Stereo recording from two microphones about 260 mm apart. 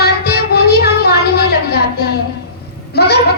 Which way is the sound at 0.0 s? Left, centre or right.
Left.